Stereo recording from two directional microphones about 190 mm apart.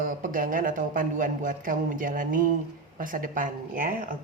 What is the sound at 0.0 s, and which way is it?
Speech, 45° right (ahead or behind).